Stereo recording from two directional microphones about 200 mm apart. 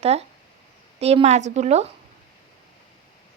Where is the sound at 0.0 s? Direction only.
30° right (ahead or behind).